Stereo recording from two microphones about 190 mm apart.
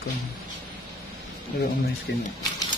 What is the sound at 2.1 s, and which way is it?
Speech, 65° left (ahead or behind).